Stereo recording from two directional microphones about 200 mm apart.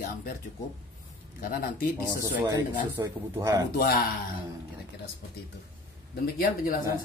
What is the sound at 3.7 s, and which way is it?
Speech, 50° left (ahead or behind).